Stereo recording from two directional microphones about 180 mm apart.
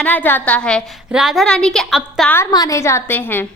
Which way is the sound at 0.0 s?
10° left (ahead or behind).